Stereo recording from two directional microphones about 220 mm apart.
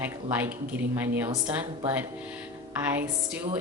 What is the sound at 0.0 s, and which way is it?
Speech, 10° right (ahead or behind).